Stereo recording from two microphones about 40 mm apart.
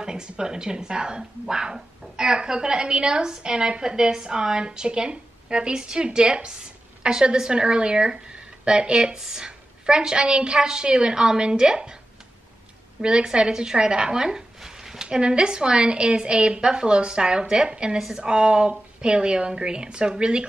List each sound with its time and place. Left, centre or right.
0.0 s a woman's voice: centre
9.2 s speech: centre
9.8 s a woman's voice: right
13.0 s speech: right
15.0 s a woman's voice: right
18.2 s a woman's voice: right